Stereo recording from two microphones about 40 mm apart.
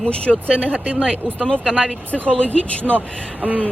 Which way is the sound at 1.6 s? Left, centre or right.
Centre.